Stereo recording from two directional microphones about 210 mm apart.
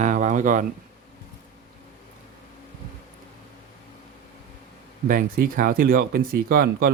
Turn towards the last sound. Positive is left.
turn(degrees=-45)  # may be behind; listen again after turning